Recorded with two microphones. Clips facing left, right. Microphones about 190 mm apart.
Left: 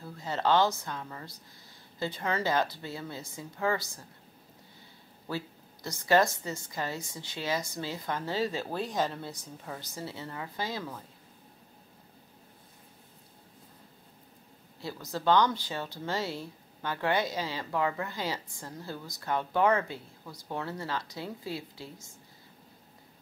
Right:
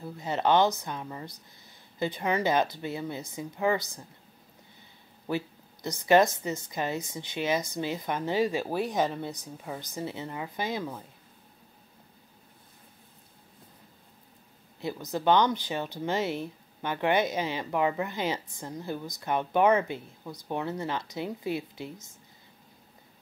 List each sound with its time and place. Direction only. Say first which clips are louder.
0.0 s speech: right 3 dB; 20° right (ahead or behind)
5.3 s speech: right 5 dB; 20° right (ahead or behind)
14.8 s speech: right 4 dB; 20° right (ahead or behind)